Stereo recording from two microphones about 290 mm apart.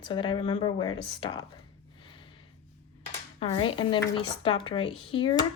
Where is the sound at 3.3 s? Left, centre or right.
Centre.